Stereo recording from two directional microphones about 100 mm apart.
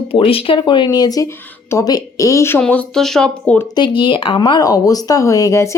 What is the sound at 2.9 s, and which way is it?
Speech, 5° left (ahead or behind).